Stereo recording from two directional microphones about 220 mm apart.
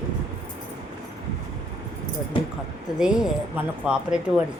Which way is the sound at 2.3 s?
20° left (ahead or behind).